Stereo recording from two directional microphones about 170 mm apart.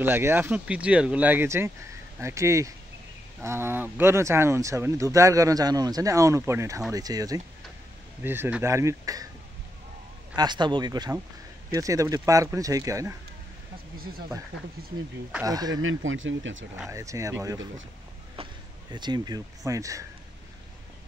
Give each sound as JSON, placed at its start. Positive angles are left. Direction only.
{"t": 0.0, "sound": "speech", "side_deg": -15}
{"t": 10.3, "sound": "speech", "side_deg": -25}
{"t": 15.4, "sound": "speech", "side_deg": -20}
{"t": 16.7, "sound": "speech", "side_deg": -15}
{"t": 18.3, "sound": "speech", "side_deg": -30}